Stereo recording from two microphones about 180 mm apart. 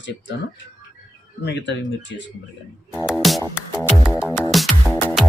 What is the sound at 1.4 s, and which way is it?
Speech, 75° left (ahead or behind).